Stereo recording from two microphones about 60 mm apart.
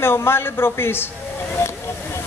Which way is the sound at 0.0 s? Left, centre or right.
Left.